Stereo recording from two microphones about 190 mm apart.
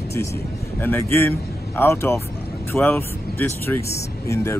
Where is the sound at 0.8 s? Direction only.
10° left (ahead or behind).